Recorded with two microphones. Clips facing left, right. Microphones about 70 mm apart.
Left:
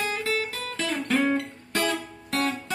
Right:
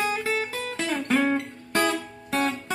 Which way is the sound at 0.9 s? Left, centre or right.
Centre.